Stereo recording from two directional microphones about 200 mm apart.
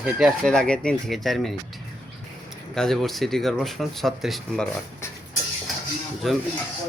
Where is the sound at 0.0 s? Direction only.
Centre (ahead or behind).